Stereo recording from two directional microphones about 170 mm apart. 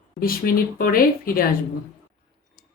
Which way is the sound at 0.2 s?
60° left (ahead or behind).